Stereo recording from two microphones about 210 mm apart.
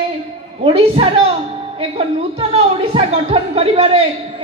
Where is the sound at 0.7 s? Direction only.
30° right (ahead or behind).